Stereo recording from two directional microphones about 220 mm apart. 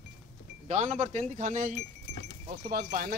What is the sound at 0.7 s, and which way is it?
Speech, 35° right (ahead or behind).